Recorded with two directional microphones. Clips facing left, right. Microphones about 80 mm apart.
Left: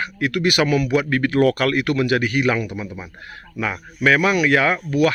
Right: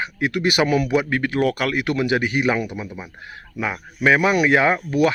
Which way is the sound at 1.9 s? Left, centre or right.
Centre.